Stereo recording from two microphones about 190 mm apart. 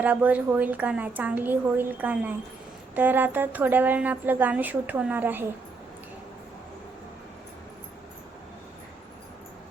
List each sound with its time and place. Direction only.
0.0 s a woman's voice: 10° right (ahead or behind)